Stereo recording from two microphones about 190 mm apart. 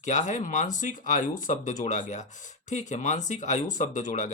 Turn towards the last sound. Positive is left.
turn(degrees=40)  # may be behind; listen again after turning